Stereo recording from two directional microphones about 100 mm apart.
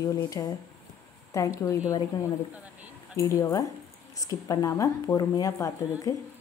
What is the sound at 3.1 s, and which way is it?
Speech, 35° left (ahead or behind).